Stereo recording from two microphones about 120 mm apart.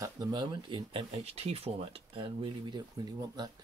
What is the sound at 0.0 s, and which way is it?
Speech, 35° right (ahead or behind).